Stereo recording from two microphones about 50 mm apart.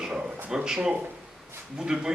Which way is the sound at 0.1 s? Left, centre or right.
Centre.